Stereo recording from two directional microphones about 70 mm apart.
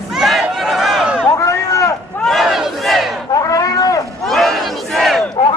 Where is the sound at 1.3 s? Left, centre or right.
Left.